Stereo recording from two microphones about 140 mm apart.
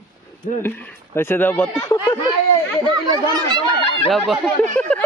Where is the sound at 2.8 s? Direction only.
30° right (ahead or behind).